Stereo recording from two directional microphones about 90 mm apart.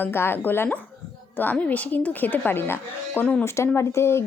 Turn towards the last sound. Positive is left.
turn(degrees=30)  # may be behind; listen again after turning